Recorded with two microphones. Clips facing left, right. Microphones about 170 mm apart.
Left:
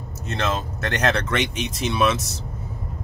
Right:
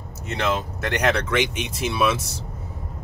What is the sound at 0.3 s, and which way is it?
Speech, 15° right (ahead or behind).